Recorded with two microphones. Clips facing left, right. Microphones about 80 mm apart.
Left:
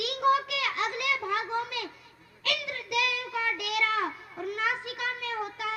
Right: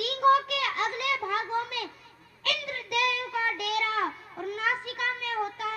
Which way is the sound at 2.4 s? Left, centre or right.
Right.